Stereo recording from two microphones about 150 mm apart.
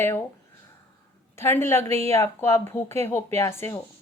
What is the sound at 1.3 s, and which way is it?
Speech, 15° left (ahead or behind).